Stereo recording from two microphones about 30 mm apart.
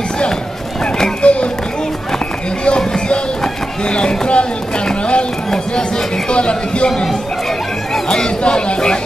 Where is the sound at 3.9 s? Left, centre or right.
Left.